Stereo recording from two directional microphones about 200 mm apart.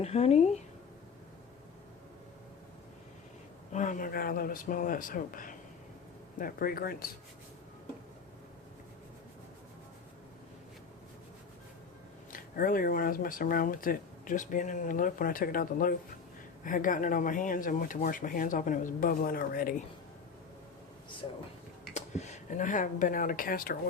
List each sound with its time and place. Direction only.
0.0 s speech: 30° left (ahead or behind)
3.7 s speech: 40° left (ahead or behind)
12.3 s speech: 45° left (ahead or behind)
21.9 s speech: 35° left (ahead or behind)